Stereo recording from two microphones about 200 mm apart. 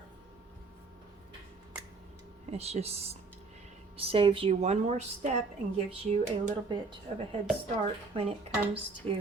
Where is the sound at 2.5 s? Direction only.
30° right (ahead or behind).